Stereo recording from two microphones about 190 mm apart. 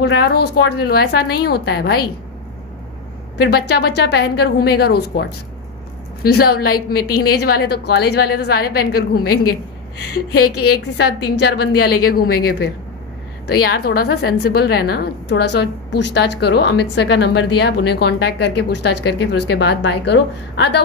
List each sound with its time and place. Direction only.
0.0 s a woman's voice: 60° left (ahead or behind)
3.3 s a woman's voice: 60° left (ahead or behind)
6.2 s a woman's voice: 55° left (ahead or behind)